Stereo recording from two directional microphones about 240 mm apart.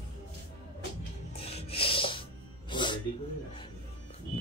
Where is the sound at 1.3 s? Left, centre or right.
Left.